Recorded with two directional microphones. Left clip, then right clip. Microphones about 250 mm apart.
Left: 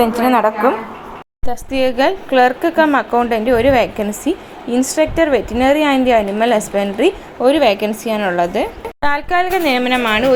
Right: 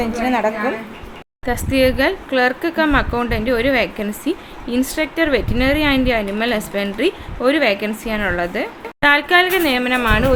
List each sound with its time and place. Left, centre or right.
0.0 s a woman's voice: centre